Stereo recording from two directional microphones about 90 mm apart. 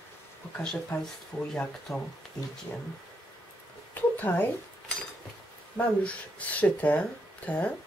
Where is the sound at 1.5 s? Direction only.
10° left (ahead or behind).